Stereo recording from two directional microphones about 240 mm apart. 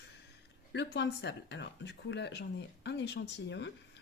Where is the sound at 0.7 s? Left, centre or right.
Left.